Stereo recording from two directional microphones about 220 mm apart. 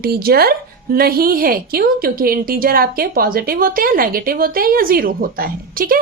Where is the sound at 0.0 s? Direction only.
45° right (ahead or behind).